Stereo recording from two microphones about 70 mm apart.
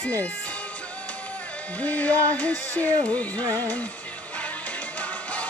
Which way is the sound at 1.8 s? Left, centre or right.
Left.